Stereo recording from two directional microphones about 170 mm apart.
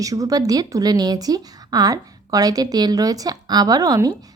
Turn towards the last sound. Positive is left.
turn(degrees=-20)  # may be behind; listen again after turning